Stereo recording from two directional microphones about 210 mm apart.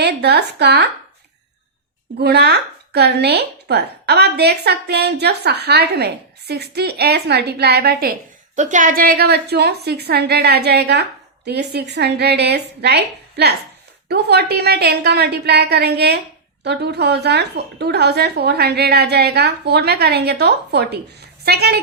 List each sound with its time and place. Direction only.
0.0 s a woman's voice: 50° right (ahead or behind)
2.1 s a woman's voice: 50° right (ahead or behind)
8.5 s a woman's voice: 35° right (ahead or behind)